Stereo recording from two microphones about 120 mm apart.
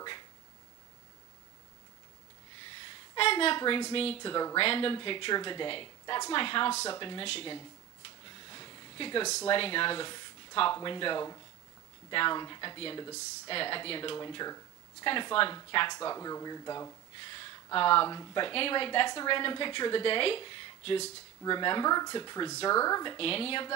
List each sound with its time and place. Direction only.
3.2 s a woman's voice: 50° left (ahead or behind)
4.2 s a woman's voice: 35° left (ahead or behind)
4.6 s a woman's voice: 50° left (ahead or behind)
6.7 s speech: 25° left (ahead or behind)
7.0 s a woman's voice: 45° left (ahead or behind)
8.5 s a sound: 35° left (ahead or behind)
9.2 s speech: 25° left (ahead or behind)
9.5 s a woman's voice: 45° left (ahead or behind)
14.3 s a woman's voice: 30° left (ahead or behind)
15.0 s a woman's voice: 45° left (ahead or behind); by 16.9 s 30° left (ahead or behind)
17.7 s a woman's voice: 45° left (ahead or behind)
23.1 s a woman's voice: 50° left (ahead or behind)